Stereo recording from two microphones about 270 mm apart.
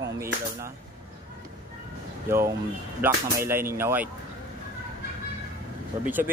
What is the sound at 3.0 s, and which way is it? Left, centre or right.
A man's voice, centre.